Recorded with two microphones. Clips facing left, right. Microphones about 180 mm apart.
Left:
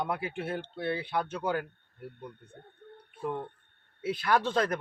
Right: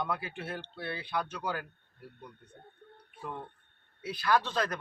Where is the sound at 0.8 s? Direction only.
20° left (ahead or behind).